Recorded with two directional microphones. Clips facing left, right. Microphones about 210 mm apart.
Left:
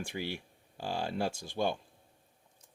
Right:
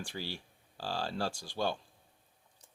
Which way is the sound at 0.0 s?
20° left (ahead or behind).